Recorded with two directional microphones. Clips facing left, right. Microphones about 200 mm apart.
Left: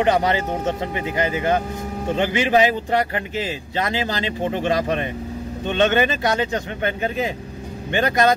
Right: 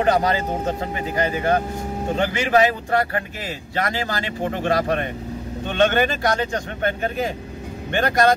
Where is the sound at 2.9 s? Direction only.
20° left (ahead or behind).